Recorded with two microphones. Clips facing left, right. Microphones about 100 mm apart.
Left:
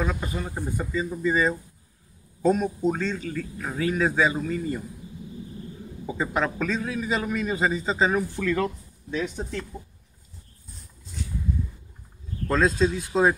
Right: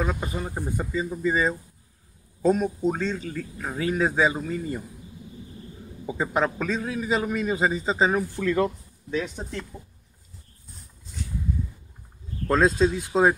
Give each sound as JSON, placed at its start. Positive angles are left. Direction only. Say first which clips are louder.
{"t": 0.0, "sound": "a man's voice", "louder": "right 1 dB", "side_deg": -15}
{"t": 2.4, "sound": "a man's voice", "louder": "even", "side_deg": -5}
{"t": 6.0, "sound": "a man's voice", "louder": "right 1 dB", "side_deg": -15}
{"t": 12.4, "sound": "a man's voice", "louder": "right 2 dB", "side_deg": -15}